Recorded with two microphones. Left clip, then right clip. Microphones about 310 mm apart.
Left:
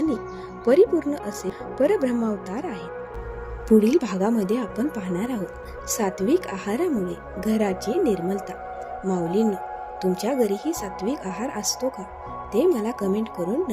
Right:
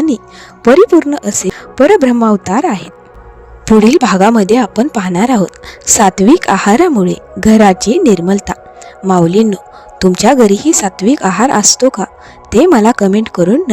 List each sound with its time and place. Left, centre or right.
0.6 s a woman's voice: right